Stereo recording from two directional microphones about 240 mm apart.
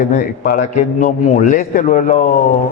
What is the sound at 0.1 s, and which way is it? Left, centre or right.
A man's voice, left.